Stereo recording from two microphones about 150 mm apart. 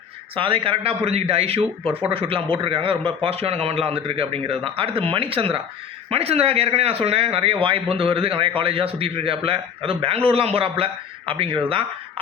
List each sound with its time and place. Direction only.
0.3 s speech: 35° right (ahead or behind)